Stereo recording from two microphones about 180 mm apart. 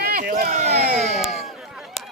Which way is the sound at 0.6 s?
40° right (ahead or behind).